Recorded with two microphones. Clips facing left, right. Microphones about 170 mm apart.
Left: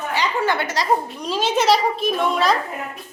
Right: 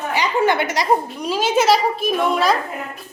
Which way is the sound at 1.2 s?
5° right (ahead or behind).